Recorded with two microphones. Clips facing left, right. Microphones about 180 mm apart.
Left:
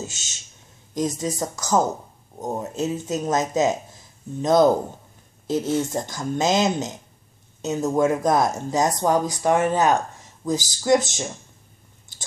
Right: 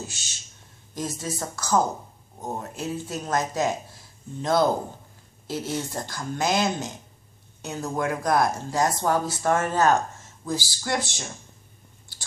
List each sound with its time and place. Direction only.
0.0 s speech: 45° left (ahead or behind)
0.9 s speech: 20° left (ahead or behind)